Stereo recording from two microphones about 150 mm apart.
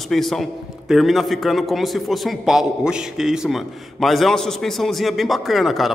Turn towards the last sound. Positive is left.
turn(degrees=0)  # may be behind; listen again after turning